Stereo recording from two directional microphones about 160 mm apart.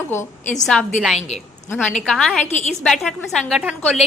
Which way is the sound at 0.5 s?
5° left (ahead or behind).